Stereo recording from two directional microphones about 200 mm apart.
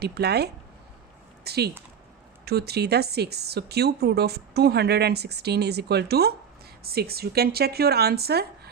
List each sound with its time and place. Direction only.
0.0 s speech: 55° right (ahead or behind)